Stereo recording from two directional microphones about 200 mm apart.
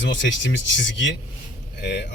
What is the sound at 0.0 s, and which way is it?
A man's voice, 65° left (ahead or behind).